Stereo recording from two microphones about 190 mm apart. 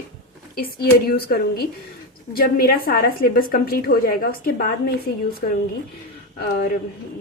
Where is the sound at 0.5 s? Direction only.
55° left (ahead or behind).